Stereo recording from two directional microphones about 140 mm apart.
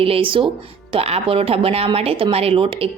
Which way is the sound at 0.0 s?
40° right (ahead or behind).